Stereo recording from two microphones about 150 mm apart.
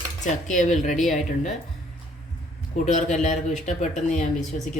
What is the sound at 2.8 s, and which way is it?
Speech, 55° left (ahead or behind).